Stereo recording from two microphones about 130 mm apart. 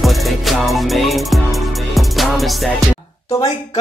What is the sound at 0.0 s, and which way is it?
Music, centre (ahead or behind).